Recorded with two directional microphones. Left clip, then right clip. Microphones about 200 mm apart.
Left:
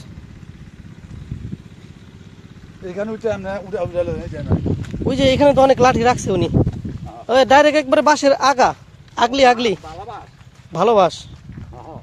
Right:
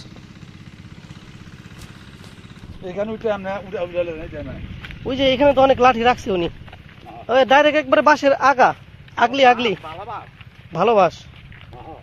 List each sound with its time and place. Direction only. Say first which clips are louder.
2.9 s speech: even; 60° left (ahead or behind); by 4.2 s 45° left (ahead or behind)
5.0 s speech: left 2 dB; 25° left (ahead or behind)